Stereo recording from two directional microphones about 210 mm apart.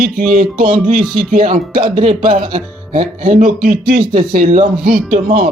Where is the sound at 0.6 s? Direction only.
35° right (ahead or behind).